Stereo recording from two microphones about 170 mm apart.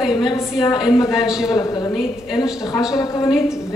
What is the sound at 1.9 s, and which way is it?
Speech, centre (ahead or behind).